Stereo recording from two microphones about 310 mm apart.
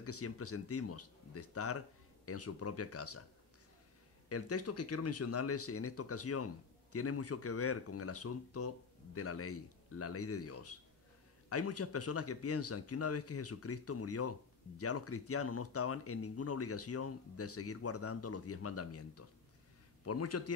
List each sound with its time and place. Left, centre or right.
0.0 s speech: left
4.3 s speech: left